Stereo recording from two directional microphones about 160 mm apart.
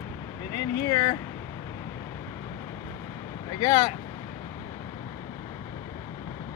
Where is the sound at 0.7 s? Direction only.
20° left (ahead or behind).